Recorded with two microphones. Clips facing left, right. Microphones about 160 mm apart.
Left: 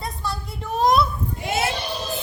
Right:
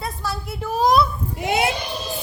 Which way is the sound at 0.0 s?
Centre (ahead or behind).